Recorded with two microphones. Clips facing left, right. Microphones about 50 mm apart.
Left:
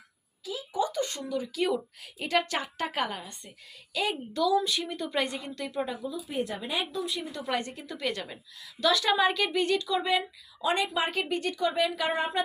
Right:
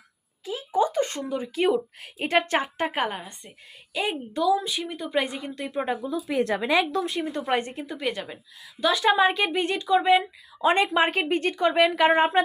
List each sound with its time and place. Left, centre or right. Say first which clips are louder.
0.4 s a woman's voice: right 6 dB; right; by 5.5 s centre
5.5 s speech: right 4 dB; right
5.8 s speech: right 7 dB; right
6.2 s speech: right 10 dB; right
6.9 s a woman's voice: right 6 dB; right
7.9 s a woman's voice: right 2 dB; centre; by 12.4 s right